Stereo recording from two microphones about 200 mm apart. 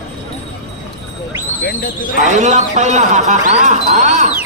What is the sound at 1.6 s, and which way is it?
Speech, 50° left (ahead or behind).